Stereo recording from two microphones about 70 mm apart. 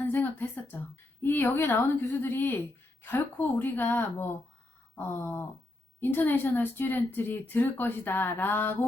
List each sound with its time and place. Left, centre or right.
0.0 s a woman's voice: left